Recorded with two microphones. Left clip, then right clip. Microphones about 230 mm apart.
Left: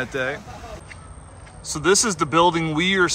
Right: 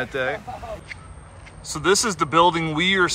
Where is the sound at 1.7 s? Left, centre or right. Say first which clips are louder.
Left 1 dB; centre.